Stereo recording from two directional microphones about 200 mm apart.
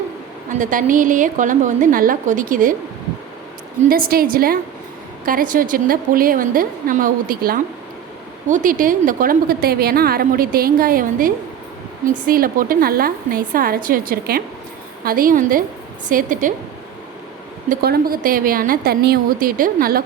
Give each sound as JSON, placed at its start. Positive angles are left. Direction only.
{"t": 0.6, "sound": "a woman's voice", "side_deg": -40}
{"t": 3.8, "sound": "a woman's voice", "side_deg": -45}
{"t": 17.7, "sound": "a woman's voice", "side_deg": -50}